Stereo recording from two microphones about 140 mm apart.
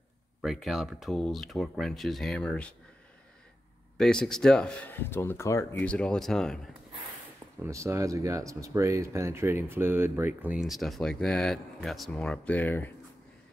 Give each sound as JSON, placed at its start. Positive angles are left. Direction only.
{"t": 0.4, "sound": "speech", "side_deg": 0}
{"t": 4.0, "sound": "speech", "side_deg": 5}
{"t": 5.8, "sound": "speech", "side_deg": 10}
{"t": 7.6, "sound": "speech", "side_deg": -20}